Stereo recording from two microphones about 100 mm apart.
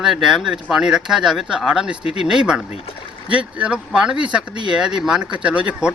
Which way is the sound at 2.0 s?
75° left (ahead or behind).